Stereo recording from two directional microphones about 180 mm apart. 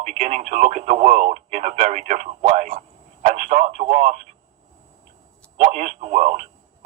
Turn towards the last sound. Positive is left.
turn(degrees=-40)  # may be behind; listen again after turning